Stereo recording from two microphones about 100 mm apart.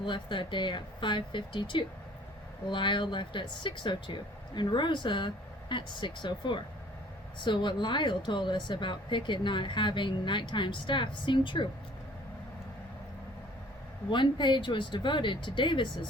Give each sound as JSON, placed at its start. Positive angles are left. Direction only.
{"t": 0.0, "sound": "a woman's voice", "side_deg": 55}
{"t": 14.1, "sound": "a woman's voice", "side_deg": 50}